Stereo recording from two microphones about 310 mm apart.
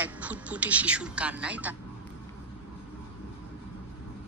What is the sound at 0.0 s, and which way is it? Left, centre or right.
Speech, centre.